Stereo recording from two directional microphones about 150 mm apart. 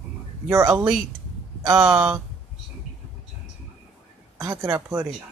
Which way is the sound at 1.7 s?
10° right (ahead or behind).